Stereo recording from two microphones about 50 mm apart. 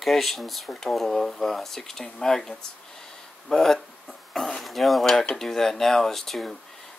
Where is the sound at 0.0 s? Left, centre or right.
Centre.